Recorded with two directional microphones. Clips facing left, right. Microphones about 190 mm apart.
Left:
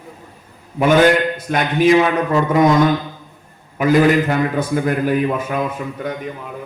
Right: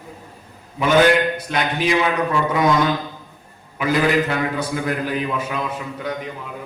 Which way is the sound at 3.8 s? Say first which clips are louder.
Left 5 dB; 45° left (ahead or behind).